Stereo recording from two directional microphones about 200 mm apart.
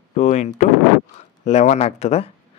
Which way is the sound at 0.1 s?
35° left (ahead or behind).